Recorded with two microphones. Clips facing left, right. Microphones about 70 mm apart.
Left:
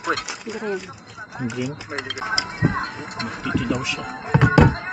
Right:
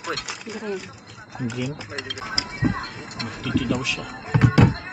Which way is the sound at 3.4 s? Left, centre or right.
Left.